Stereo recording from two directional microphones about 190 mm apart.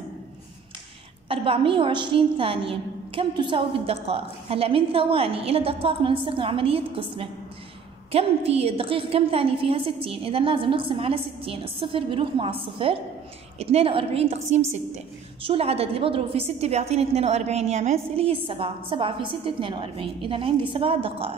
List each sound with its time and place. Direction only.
1.3 s a woman's voice: 30° right (ahead or behind)